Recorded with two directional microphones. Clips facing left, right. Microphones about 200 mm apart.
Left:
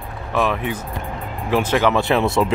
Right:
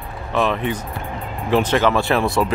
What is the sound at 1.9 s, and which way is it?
Speech, 20° left (ahead or behind).